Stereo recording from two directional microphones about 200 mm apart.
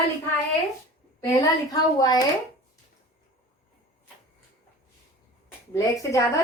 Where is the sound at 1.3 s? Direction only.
15° left (ahead or behind).